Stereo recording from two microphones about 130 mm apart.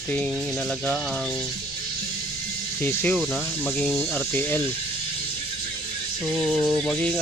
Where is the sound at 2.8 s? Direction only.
15° left (ahead or behind).